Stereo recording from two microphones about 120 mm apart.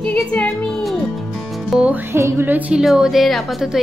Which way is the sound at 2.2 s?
20° right (ahead or behind).